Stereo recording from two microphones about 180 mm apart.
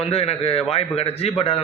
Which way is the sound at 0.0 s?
35° left (ahead or behind).